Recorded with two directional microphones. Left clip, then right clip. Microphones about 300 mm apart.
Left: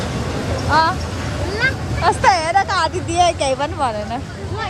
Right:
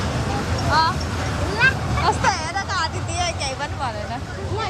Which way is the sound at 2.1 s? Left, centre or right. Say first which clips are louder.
Left 7 dB; left.